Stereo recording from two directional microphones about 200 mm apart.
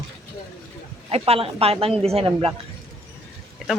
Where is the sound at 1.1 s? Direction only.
30° right (ahead or behind).